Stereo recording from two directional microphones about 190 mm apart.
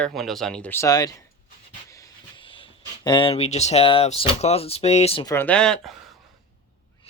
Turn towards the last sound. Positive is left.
turn(degrees=5)  # may be behind; listen again after turning